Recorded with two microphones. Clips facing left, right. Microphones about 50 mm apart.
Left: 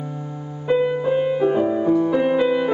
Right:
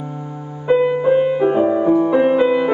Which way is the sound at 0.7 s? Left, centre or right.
Centre.